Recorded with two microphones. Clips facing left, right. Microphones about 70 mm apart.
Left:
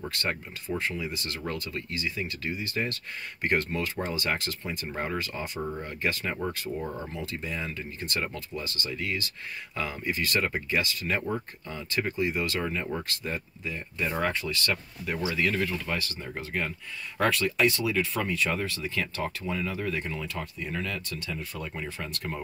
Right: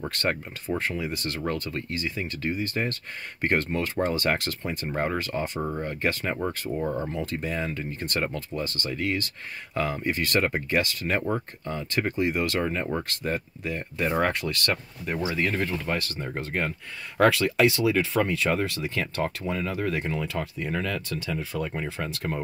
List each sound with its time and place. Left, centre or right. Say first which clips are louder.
0.1 s speech: right 4 dB; right
5.6 s speech: right 3 dB; right
6.8 s speech: right 6 dB; right
12.5 s speech: right 4 dB; right
14.4 s speech: right 2 dB; right
14.7 s speech: right 2 dB; right
17.2 s speech: right 4 dB; right
19.4 s speech: right 3 dB; right
21.7 s speech: right 4 dB; right